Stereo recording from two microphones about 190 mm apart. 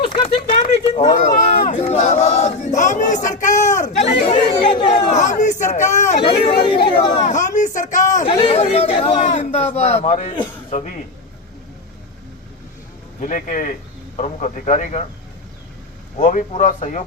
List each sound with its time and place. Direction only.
0.0 s a sound: 30° left (ahead or behind)
1.6 s battle cry: 40° left (ahead or behind)
6.2 s chatter: 25° left (ahead or behind)
7.3 s a sound: 40° left (ahead or behind)
10.4 s speech: 35° left (ahead or behind)
13.1 s speech: 40° left (ahead or behind)
16.1 s speech: 40° left (ahead or behind)